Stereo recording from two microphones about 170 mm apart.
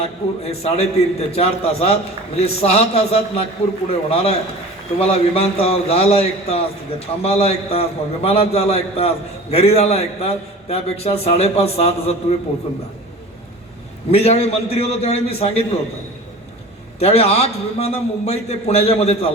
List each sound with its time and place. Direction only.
0.0 s a man's voice: 35° left (ahead or behind)
14.1 s a man's voice: 35° left (ahead or behind)
17.0 s a man's voice: 40° left (ahead or behind)